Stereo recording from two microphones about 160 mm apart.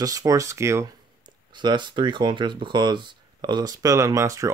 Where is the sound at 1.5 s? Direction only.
30° right (ahead or behind).